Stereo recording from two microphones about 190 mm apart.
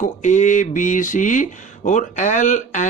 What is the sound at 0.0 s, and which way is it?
Speech, 40° left (ahead or behind).